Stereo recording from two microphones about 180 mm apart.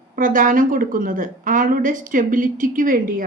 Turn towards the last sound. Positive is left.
turn(degrees=-50)  # may be behind; listen again after turning